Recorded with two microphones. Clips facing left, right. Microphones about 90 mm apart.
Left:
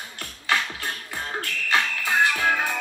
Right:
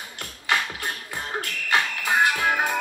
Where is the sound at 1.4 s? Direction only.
20° right (ahead or behind).